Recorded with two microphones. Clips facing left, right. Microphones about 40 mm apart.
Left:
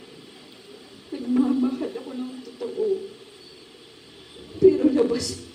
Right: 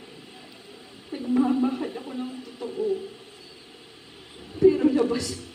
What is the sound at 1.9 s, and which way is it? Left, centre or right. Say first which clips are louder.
Speech: left 1 dB; centre.